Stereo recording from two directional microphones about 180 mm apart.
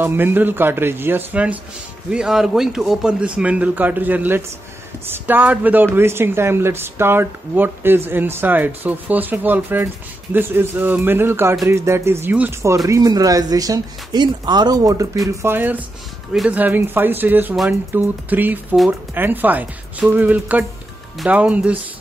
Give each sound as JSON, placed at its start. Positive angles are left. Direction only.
{"t": 0.0, "sound": "a man's voice", "side_deg": -10}